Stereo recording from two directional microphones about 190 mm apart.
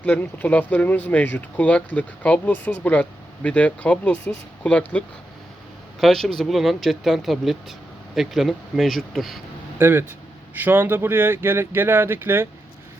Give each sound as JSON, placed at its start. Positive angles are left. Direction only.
{"t": 0.0, "sound": "speech", "side_deg": 10}
{"t": 9.7, "sound": "speech", "side_deg": -10}